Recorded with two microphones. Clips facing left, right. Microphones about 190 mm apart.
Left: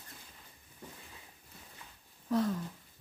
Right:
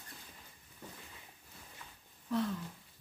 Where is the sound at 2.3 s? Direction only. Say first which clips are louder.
Left 4 dB; 40° left (ahead or behind).